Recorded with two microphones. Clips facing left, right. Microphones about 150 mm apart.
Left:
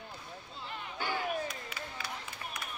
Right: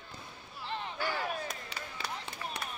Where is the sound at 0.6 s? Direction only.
30° right (ahead or behind).